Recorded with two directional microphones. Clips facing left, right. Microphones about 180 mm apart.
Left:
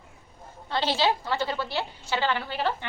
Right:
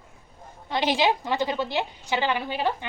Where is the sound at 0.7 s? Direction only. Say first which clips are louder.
Right 2 dB; 15° right (ahead or behind).